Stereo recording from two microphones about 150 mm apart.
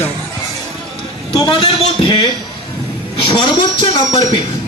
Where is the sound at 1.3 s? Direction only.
30° left (ahead or behind).